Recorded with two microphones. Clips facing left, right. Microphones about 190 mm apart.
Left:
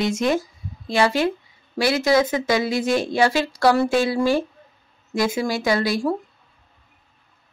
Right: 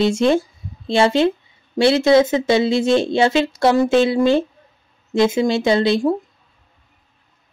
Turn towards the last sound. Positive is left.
turn(degrees=-25)  # may be behind; listen again after turning